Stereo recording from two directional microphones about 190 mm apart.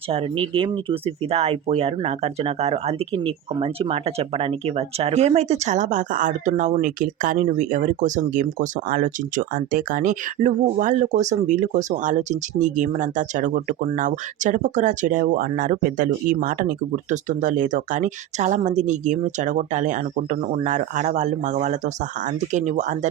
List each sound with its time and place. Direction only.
0.1 s speech: 30° right (ahead or behind)